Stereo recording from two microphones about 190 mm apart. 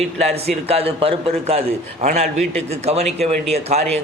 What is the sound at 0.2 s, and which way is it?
A man's voice, 30° right (ahead or behind).